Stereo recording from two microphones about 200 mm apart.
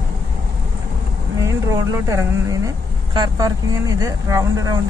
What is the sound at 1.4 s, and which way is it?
A woman's voice, 15° right (ahead or behind).